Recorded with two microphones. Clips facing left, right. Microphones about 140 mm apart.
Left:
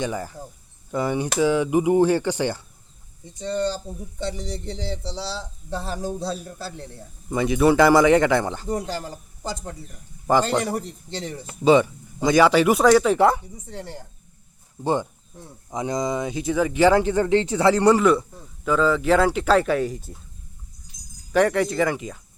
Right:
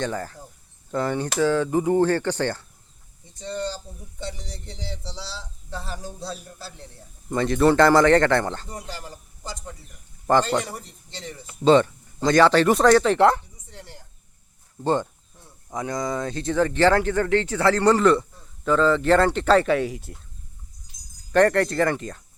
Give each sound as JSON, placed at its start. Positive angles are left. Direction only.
{"t": 0.0, "sound": "speech", "side_deg": 10}
{"t": 3.3, "sound": "speech", "side_deg": 60}
{"t": 4.5, "sound": "speech", "side_deg": 25}
{"t": 5.1, "sound": "speech", "side_deg": 60}
{"t": 7.3, "sound": "speech", "side_deg": 5}
{"t": 8.7, "sound": "a man's voice", "side_deg": 35}
{"t": 10.3, "sound": "speech", "side_deg": 5}
{"t": 11.6, "sound": "speech", "side_deg": 10}
{"t": 15.7, "sound": "speech", "side_deg": 20}
{"t": 21.3, "sound": "speech", "side_deg": 5}